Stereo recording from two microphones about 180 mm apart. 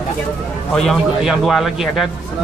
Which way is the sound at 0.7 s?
Centre (ahead or behind).